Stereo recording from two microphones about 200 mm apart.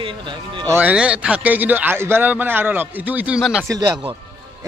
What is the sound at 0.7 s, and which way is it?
A man's voice, 5° right (ahead or behind).